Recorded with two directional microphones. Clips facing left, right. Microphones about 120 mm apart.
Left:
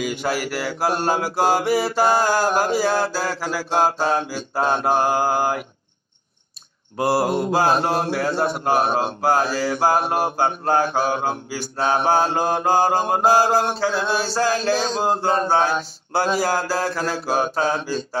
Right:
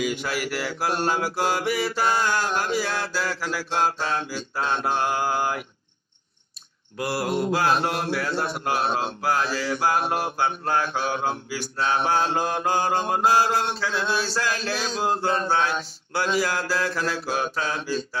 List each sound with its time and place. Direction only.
0.0 s mantra: 35° left (ahead or behind)
7.0 s mantra: 30° left (ahead or behind)
8.7 s mantra: 50° left (ahead or behind)
9.2 s mantra: 40° left (ahead or behind)